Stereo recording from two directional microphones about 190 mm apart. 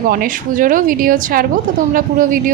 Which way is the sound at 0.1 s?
45° right (ahead or behind).